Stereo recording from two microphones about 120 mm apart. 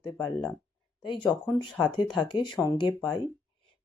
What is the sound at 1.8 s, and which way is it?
Speech, 40° left (ahead or behind).